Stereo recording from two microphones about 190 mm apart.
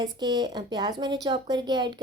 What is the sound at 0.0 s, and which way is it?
A woman's voice, 20° right (ahead or behind).